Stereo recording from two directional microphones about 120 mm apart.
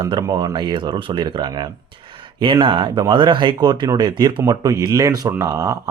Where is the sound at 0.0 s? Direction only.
30° right (ahead or behind).